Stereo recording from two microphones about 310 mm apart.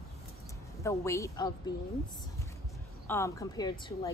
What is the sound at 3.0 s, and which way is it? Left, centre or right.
Speech, centre.